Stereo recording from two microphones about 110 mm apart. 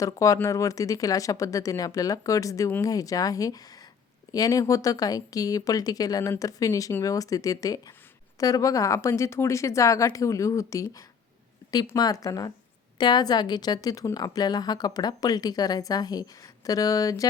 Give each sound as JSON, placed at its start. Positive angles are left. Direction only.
{"t": 0.0, "sound": "a woman's voice", "side_deg": 30}